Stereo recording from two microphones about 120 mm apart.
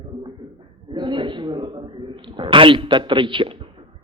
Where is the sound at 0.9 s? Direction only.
40° right (ahead or behind).